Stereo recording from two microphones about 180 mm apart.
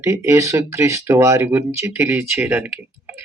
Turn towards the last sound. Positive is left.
turn(degrees=-10)  # may be behind; listen again after turning